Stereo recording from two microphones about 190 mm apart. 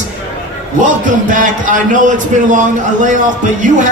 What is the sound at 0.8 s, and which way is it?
A man's voice, 40° right (ahead or behind).